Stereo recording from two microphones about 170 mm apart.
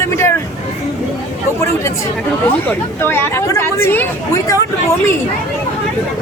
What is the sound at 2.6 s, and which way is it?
Speech, 10° left (ahead or behind).